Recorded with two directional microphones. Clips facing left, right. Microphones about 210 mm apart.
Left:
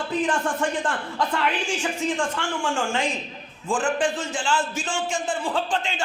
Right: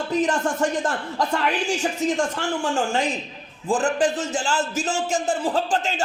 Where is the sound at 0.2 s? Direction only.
40° right (ahead or behind).